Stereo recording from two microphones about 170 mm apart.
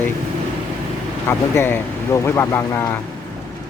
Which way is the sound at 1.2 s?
15° left (ahead or behind).